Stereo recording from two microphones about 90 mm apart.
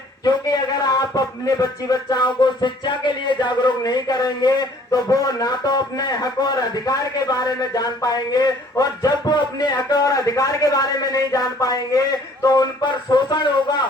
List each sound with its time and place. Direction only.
0.3 s a man's voice: 50° left (ahead or behind)